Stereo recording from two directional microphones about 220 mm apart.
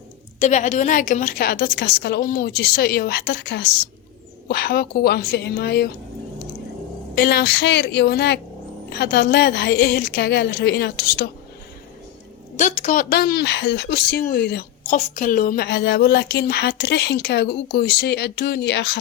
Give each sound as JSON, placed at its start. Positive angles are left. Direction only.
{"t": 0.3, "sound": "speech", "side_deg": 30}
{"t": 7.2, "sound": "speech", "side_deg": 45}
{"t": 12.5, "sound": "speech", "side_deg": 35}